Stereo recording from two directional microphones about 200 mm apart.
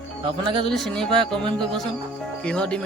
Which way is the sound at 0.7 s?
Centre (ahead or behind).